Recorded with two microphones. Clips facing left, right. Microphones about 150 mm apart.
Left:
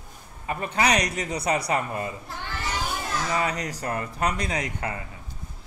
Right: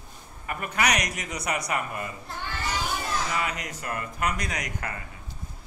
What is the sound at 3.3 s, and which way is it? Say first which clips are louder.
Speech: left 4 dB; 35° left (ahead or behind).